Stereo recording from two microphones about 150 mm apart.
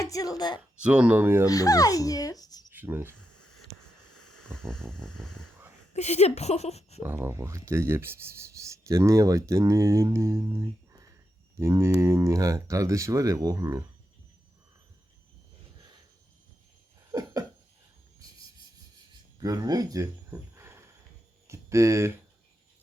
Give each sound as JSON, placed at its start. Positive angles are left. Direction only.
{"t": 0.0, "sound": "a woman's voice", "side_deg": 25}
{"t": 0.8, "sound": "speech", "side_deg": -5}
{"t": 1.5, "sound": "speech", "side_deg": 25}
{"t": 2.7, "sound": "speech", "side_deg": -15}
{"t": 4.5, "sound": "a sound", "side_deg": 5}
{"t": 5.9, "sound": "speech", "side_deg": 45}
{"t": 7.0, "sound": "speech", "side_deg": -15}
{"t": 17.1, "sound": "a sound", "side_deg": -25}
{"t": 19.4, "sound": "speech", "side_deg": -25}